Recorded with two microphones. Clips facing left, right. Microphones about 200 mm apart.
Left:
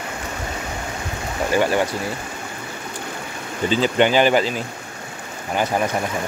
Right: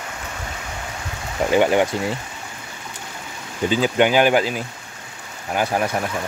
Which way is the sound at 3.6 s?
10° right (ahead or behind).